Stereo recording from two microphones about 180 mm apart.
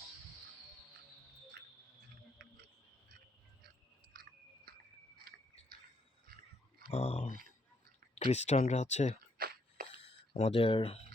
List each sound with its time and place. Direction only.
4.1 s chewing: 55° right (ahead or behind)
6.9 s speech: 35° left (ahead or behind)
9.4 s a sound: 55° right (ahead or behind)
10.3 s speech: 30° left (ahead or behind)